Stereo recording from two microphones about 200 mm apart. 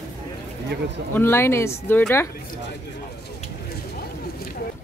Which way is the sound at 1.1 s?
10° left (ahead or behind).